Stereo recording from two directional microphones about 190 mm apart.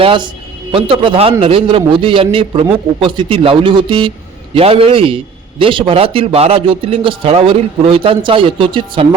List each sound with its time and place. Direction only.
0.0 s a man's voice: 25° right (ahead or behind)